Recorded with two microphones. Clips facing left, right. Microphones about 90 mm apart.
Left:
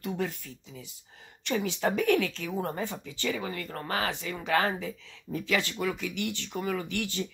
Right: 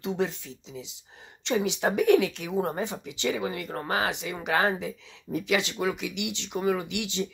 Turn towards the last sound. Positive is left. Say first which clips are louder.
# right 2 dB
turn(degrees=-20)  # may be behind; listen again after turning